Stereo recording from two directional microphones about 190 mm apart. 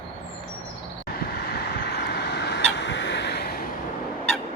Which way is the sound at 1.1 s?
55° left (ahead or behind).